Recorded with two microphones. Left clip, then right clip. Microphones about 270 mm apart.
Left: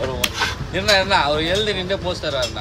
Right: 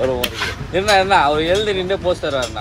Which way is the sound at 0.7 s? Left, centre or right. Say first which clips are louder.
Right 4 dB; centre.